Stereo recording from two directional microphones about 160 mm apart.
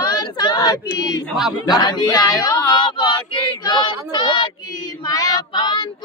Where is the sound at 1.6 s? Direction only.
25° left (ahead or behind).